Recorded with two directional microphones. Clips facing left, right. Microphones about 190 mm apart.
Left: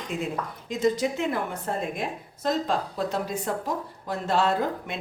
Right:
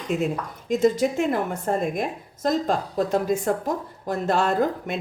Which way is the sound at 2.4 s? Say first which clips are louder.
Right 3 dB; 45° right (ahead or behind).